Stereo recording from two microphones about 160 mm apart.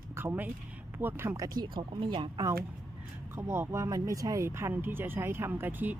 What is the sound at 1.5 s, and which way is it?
Speech, 30° right (ahead or behind).